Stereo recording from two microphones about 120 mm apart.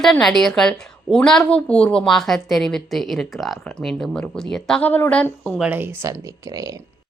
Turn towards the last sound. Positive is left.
turn(degrees=-25)  # may be behind; listen again after turning